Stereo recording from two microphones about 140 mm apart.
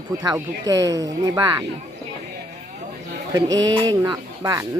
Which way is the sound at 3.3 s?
25° right (ahead or behind).